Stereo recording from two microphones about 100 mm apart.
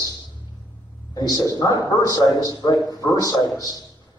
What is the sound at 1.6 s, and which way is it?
A man's voice, 40° left (ahead or behind).